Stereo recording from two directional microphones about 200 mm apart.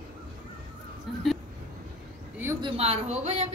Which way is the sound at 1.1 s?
Centre (ahead or behind).